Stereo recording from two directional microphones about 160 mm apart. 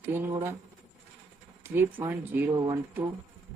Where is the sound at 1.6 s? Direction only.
15° right (ahead or behind).